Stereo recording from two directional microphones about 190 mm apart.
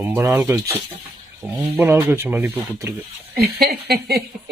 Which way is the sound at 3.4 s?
55° right (ahead or behind).